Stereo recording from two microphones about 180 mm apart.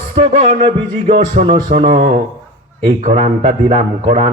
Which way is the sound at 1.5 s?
25° right (ahead or behind).